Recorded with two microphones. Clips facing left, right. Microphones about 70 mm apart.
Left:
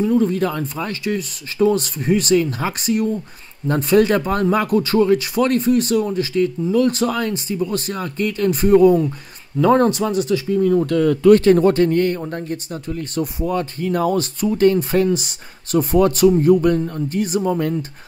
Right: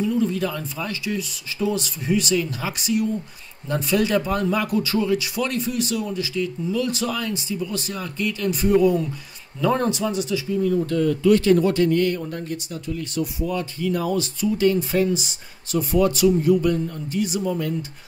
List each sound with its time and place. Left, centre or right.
0.0 s speech: left